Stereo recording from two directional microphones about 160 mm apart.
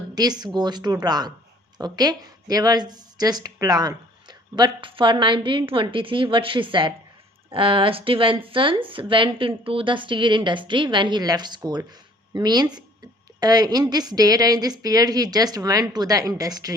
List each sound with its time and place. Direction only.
0.1 s a woman's voice: 25° right (ahead or behind)